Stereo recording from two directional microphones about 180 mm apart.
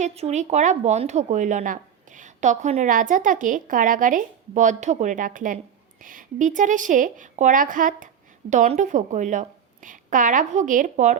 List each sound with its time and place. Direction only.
0.0 s a woman's voice: 35° right (ahead or behind)